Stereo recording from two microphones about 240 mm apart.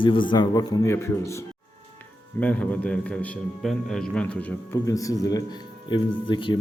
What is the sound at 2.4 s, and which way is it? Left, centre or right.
A man's voice, centre.